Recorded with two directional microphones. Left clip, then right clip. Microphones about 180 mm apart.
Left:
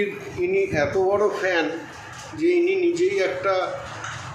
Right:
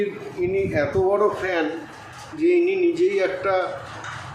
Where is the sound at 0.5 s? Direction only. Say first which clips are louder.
Left 1 dB; 15° right (ahead or behind).